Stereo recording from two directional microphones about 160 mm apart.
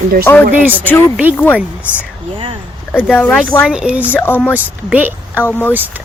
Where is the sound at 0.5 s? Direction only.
10° right (ahead or behind).